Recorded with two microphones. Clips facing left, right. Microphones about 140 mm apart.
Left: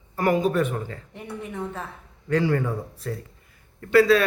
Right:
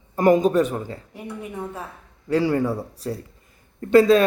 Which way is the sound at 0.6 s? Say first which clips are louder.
Right 3 dB; 35° right (ahead or behind).